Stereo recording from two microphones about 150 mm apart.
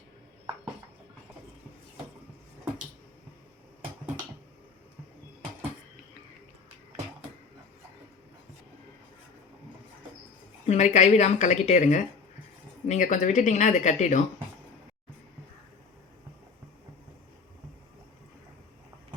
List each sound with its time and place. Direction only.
10.7 s speech: 50° left (ahead or behind)